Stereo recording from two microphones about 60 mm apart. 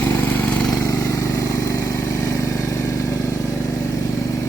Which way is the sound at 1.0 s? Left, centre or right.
Left.